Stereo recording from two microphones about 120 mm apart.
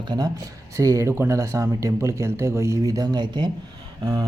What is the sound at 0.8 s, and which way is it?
A man's voice, 25° right (ahead or behind).